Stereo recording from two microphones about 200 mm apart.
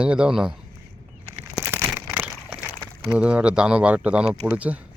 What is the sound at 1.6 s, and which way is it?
Crumpling, 15° right (ahead or behind).